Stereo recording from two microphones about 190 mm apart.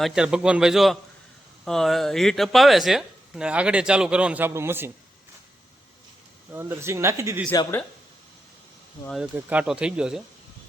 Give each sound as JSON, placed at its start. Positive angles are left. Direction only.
{"t": 0.0, "sound": "speech", "side_deg": -5}
{"t": 6.5, "sound": "speech", "side_deg": -10}
{"t": 7.5, "sound": "speech", "side_deg": 20}
{"t": 9.0, "sound": "speech", "side_deg": 0}